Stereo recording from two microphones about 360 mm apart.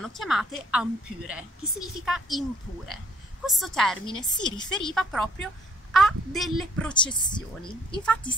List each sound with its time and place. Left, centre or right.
0.0 s a woman's voice: centre
3.4 s a woman's voice: centre
4.0 s a woman's voice: centre
4.7 s a woman's voice: centre
6.9 s a woman's voice: centre